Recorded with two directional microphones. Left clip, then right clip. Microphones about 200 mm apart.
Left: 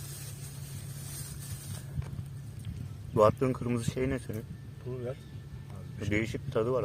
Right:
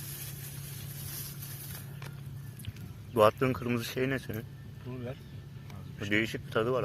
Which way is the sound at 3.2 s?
10° left (ahead or behind).